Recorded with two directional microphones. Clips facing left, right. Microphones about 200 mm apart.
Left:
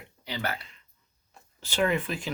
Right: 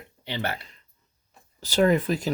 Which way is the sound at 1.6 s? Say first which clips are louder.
Right 6 dB; 40° right (ahead or behind).